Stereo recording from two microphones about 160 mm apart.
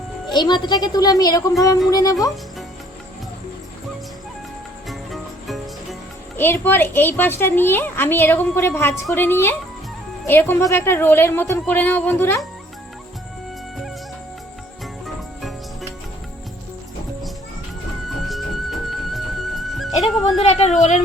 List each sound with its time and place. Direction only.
0.3 s a child's voice: 25° left (ahead or behind)
4.9 s music: centre (ahead or behind)
6.3 s a woman's voice: 15° left (ahead or behind)
15.0 s jingle bell: centre (ahead or behind)
18.3 s music: centre (ahead or behind)
20.4 s a woman's voice: 40° left (ahead or behind)